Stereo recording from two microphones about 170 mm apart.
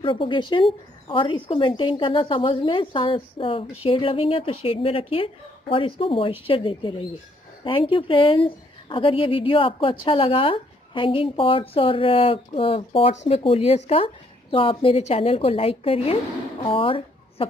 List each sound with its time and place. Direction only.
0.0 s a woman's voice: 30° left (ahead or behind)